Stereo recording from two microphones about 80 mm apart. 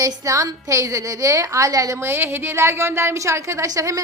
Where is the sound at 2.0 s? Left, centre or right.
Right.